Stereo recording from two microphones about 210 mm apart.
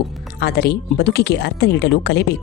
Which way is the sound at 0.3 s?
50° left (ahead or behind).